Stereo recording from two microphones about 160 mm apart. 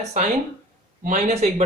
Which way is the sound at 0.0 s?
45° right (ahead or behind).